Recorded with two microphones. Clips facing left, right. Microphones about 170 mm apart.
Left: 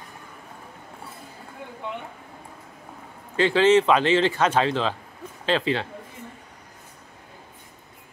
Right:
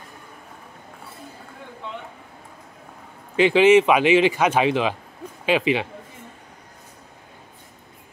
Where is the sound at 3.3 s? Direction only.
15° right (ahead or behind).